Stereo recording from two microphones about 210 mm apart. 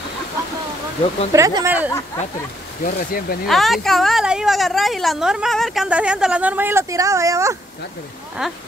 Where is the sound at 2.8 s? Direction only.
45° left (ahead or behind).